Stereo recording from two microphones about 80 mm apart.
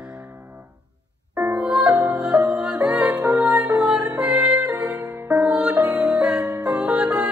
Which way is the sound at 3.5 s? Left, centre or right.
Centre.